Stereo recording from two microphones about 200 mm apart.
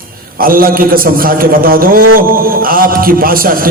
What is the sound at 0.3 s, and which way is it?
A man's voice, 45° right (ahead or behind).